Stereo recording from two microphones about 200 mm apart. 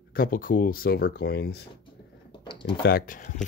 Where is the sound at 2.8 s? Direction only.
45° left (ahead or behind).